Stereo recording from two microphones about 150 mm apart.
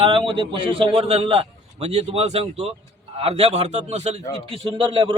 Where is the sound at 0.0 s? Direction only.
35° right (ahead or behind).